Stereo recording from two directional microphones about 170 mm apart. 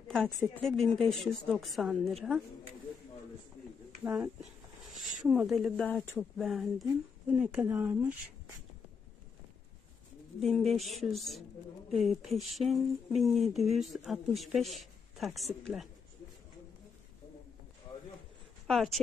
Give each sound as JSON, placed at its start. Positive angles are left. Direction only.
{"t": 0.7, "sound": "speech", "side_deg": 5}
{"t": 4.0, "sound": "speech", "side_deg": -15}
{"t": 4.9, "sound": "a sound", "side_deg": -45}
{"t": 5.3, "sound": "speech", "side_deg": -5}
{"t": 10.4, "sound": "speech", "side_deg": 0}
{"t": 18.7, "sound": "speech", "side_deg": 0}